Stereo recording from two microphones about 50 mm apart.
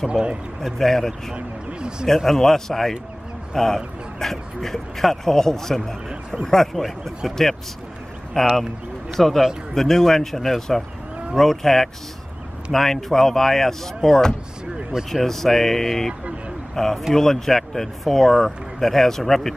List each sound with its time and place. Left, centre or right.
0.1 s speech: right
0.6 s speech: centre
1.3 s speech: centre
2.0 s speech: centre
14.8 s basketball bounce: centre
15.0 s speech: centre